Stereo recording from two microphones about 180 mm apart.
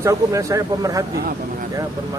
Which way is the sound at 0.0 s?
15° right (ahead or behind).